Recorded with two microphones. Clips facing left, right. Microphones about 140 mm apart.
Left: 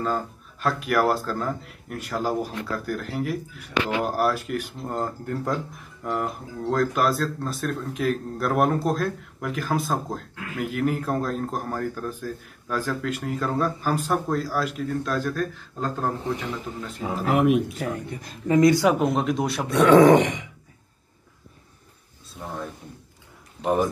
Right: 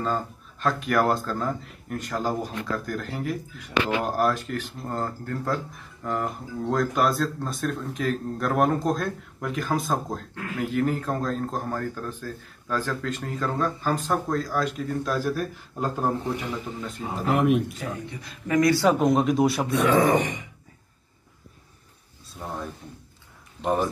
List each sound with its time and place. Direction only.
0.0 s speech: 5° left (ahead or behind); by 16.4 s 10° right (ahead or behind)
16.5 s speech: centre (ahead or behind)
17.7 s speech: 45° left (ahead or behind)
18.5 s speech: 25° left (ahead or behind)
18.8 s speech: 5° left (ahead or behind)
19.7 s speech: 65° left (ahead or behind)
22.3 s a sound: centre (ahead or behind)
23.6 s speech: 5° left (ahead or behind)